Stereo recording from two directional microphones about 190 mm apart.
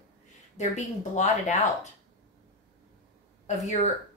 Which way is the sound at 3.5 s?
40° left (ahead or behind).